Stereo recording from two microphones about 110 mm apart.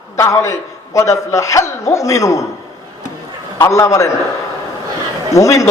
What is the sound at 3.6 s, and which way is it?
Speech, 30° left (ahead or behind).